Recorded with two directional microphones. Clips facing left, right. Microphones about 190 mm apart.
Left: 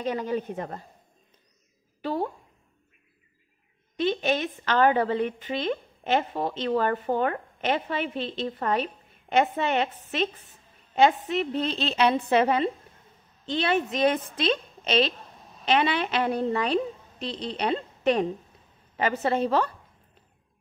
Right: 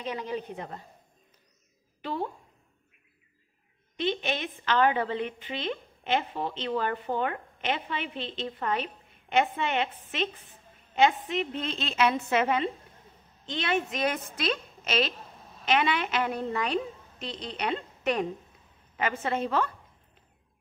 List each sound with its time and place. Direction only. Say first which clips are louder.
0.0 s a woman's voice: left 5 dB; 45° left (ahead or behind)
2.0 s a sound: left 4 dB; 40° left (ahead or behind)
4.0 s a woman's voice: left 5 dB; 40° left (ahead or behind)